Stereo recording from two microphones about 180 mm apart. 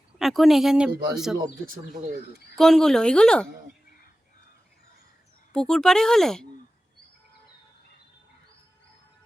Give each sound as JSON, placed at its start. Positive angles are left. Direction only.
{"t": 0.2, "sound": "speech", "side_deg": 0}
{"t": 0.9, "sound": "speech", "side_deg": -60}
{"t": 1.1, "sound": "speech", "side_deg": 0}
{"t": 1.6, "sound": "speech", "side_deg": -50}
{"t": 2.6, "sound": "speech", "side_deg": 0}
{"t": 5.5, "sound": "speech", "side_deg": 5}